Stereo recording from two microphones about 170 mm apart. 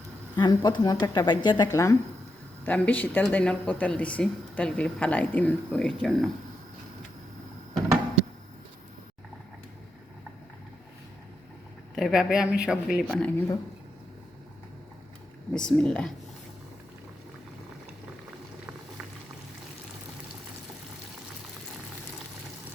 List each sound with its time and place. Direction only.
0.3 s speech: 25° left (ahead or behind); by 6.3 s centre (ahead or behind)
11.9 s speech: centre (ahead or behind)
13.1 s speech: 5° left (ahead or behind)
15.5 s speech: 5° left (ahead or behind)